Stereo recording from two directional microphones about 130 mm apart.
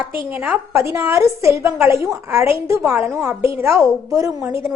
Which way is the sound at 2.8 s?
5° right (ahead or behind).